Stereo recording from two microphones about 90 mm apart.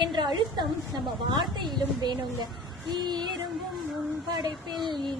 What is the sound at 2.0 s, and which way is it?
A woman's voice, 55° right (ahead or behind).